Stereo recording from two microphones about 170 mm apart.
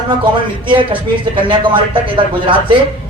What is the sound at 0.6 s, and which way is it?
A man's voice, 30° right (ahead or behind).